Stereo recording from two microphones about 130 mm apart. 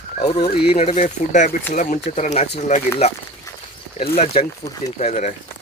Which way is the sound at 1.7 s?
75° left (ahead or behind).